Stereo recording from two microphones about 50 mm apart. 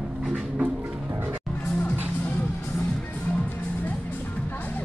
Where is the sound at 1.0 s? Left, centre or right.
Right.